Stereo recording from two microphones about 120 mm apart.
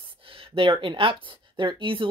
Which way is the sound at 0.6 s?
45° right (ahead or behind).